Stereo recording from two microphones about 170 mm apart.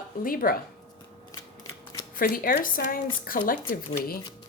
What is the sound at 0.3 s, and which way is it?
Speech, 60° left (ahead or behind).